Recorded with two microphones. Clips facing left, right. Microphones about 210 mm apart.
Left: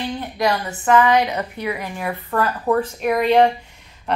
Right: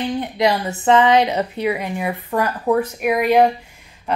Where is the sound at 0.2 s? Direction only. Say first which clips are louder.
Right 1 dB; 20° right (ahead or behind).